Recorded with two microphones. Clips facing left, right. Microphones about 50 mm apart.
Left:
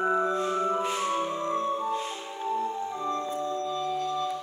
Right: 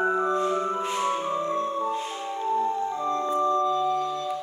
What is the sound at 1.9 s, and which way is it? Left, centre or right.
Music, centre.